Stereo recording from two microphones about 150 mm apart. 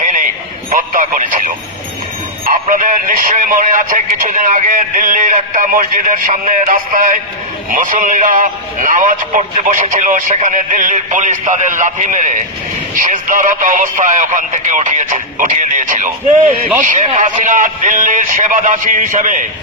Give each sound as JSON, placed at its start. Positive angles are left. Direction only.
{"t": 0.0, "sound": "a sound", "side_deg": -55}
{"t": 0.7, "sound": "radio", "side_deg": -60}
{"t": 2.5, "sound": "speech", "side_deg": -60}